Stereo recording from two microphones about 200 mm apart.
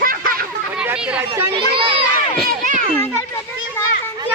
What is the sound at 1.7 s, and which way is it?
Crowd, 25° right (ahead or behind).